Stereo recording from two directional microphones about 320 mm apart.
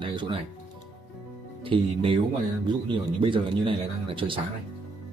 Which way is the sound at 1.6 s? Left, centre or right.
Centre.